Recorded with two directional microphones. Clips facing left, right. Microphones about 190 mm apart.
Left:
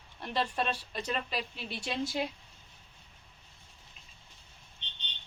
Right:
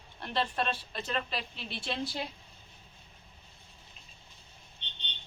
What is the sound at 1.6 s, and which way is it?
Speech, 40° left (ahead or behind).